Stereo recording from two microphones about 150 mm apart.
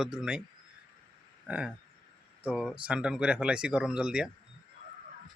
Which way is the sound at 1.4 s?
10° right (ahead or behind).